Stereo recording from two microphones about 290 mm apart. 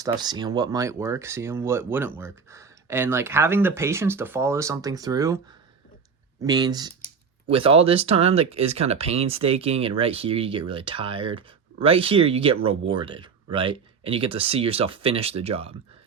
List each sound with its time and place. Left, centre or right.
0.0 s speech: centre
6.4 s speech: centre